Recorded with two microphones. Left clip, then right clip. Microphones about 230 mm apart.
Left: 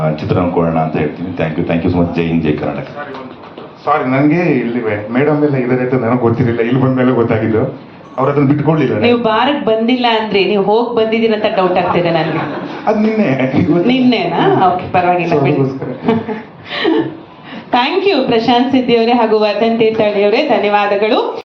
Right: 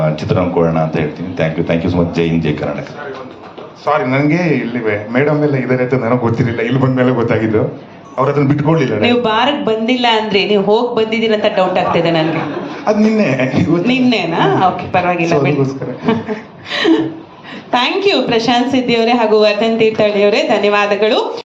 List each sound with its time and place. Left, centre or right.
0.0 s a man's voice: right
3.8 s a man's voice: right